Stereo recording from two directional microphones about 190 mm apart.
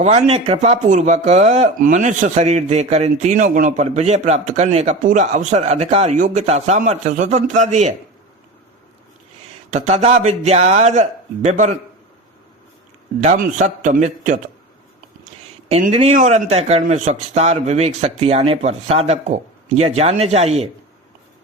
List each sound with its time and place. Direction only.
0.0 s speech: 35° right (ahead or behind)
9.6 s speech: 40° right (ahead or behind)
13.2 s a man's voice: 40° right (ahead or behind)
15.7 s speech: 35° right (ahead or behind)